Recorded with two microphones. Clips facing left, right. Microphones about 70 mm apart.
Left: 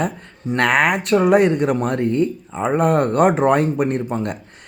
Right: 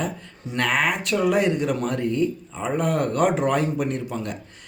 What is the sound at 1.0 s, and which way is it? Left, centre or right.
Speech, left.